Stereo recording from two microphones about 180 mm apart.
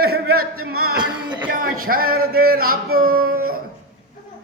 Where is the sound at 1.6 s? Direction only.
55° right (ahead or behind).